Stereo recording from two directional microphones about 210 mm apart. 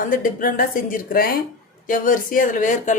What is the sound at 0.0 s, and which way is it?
Speech, 40° left (ahead or behind).